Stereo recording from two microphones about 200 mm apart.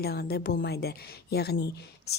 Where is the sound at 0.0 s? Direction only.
50° left (ahead or behind).